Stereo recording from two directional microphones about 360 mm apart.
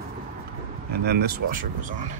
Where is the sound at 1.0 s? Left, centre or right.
Right.